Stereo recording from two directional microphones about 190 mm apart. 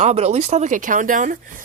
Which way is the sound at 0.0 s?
35° right (ahead or behind).